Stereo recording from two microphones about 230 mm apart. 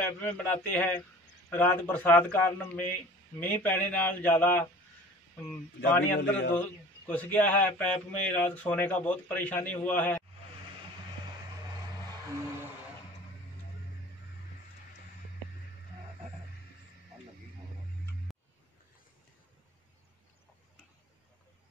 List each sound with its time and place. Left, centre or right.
0.0 s speech: centre
5.9 s speech: centre